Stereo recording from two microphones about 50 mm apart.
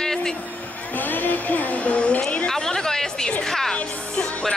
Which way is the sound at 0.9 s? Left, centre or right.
Left.